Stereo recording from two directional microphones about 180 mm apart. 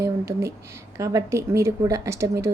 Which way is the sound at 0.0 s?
15° right (ahead or behind).